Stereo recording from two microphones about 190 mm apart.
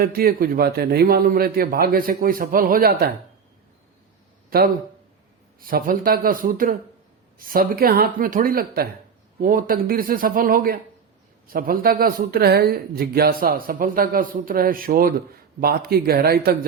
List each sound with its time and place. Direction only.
0.0 s speech: 50° right (ahead or behind)
4.4 s a sound: 50° right (ahead or behind)
5.5 s speech: 50° right (ahead or behind)